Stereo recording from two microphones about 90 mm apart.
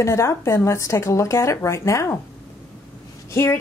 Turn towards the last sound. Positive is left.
turn(degrees=35)  # may be behind; listen again after turning